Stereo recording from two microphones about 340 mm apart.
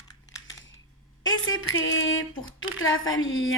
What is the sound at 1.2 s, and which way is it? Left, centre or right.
Speech, left.